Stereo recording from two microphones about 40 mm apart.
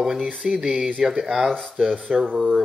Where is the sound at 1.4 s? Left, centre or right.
Centre.